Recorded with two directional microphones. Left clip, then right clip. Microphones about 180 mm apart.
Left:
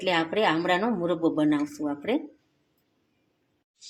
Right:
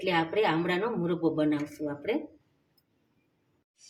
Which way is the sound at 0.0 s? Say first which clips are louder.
Left 3 dB; 50° left (ahead or behind).